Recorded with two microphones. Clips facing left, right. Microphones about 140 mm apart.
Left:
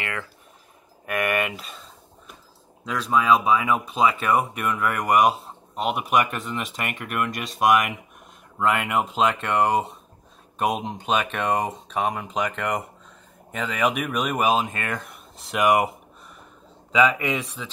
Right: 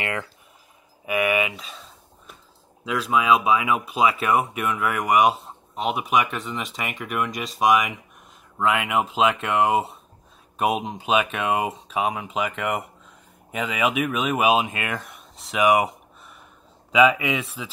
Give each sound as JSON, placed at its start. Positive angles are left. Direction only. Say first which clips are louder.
{"t": 0.0, "sound": "speech", "louder": "right 3 dB", "side_deg": -20}
{"t": 1.0, "sound": "a sound", "louder": "right 2 dB", "side_deg": -5}
{"t": 2.8, "sound": "speech", "louder": "even", "side_deg": 0}